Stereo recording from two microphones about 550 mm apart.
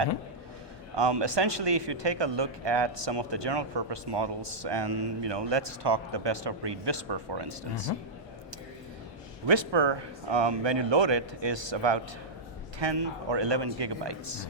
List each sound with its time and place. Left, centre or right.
0.9 s speech: right
9.5 s speech: right